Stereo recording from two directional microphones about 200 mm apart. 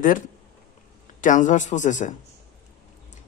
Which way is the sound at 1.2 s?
40° left (ahead or behind).